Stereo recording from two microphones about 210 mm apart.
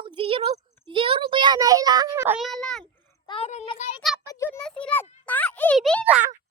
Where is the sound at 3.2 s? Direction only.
25° left (ahead or behind).